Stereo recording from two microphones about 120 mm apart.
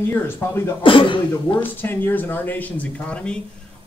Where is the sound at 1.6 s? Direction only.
15° left (ahead or behind).